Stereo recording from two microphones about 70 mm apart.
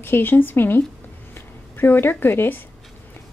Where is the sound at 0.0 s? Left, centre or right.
Left.